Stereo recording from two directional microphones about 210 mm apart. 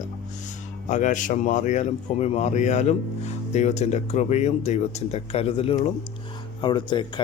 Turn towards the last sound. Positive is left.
turn(degrees=20)  # may be behind; listen again after turning